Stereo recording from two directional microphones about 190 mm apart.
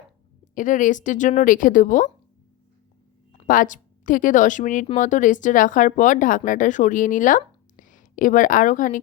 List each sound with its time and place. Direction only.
0.5 s speech: 40° left (ahead or behind)
3.3 s a woman's voice: 45° left (ahead or behind)